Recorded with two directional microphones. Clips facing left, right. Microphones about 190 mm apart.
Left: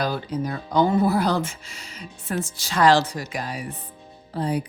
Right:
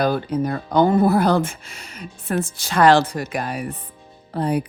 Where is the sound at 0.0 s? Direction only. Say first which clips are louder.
Right 5 dB; 55° right (ahead or behind).